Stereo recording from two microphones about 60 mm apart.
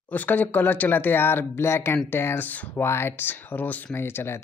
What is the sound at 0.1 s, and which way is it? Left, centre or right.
Speech, left.